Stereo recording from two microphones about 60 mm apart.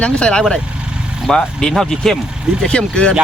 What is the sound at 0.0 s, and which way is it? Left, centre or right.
Speech, centre.